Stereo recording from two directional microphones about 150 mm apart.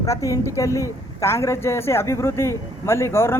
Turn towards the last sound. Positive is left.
turn(degrees=15)  # may be behind; listen again after turning